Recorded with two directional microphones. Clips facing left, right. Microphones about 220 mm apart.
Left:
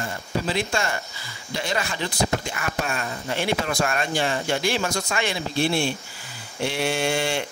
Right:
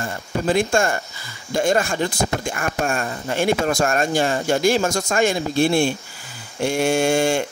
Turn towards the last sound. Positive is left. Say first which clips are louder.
# right 6 dB
turn(degrees=-45)  # may be behind; listen again after turning